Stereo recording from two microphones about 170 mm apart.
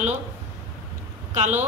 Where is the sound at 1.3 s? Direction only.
45° right (ahead or behind).